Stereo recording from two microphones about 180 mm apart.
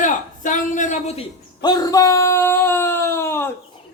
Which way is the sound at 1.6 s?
20° left (ahead or behind).